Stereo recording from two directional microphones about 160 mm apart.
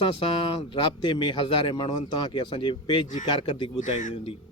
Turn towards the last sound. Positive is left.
turn(degrees=50)  # may be behind; listen again after turning